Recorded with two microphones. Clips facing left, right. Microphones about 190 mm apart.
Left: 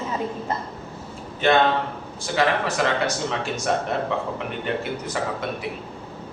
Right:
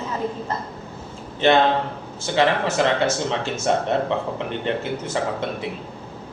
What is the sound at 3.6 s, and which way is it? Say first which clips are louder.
Speech: right 4 dB; 25° right (ahead or behind).